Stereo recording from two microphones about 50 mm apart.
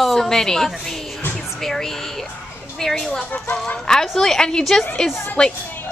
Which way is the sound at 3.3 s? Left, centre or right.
Left.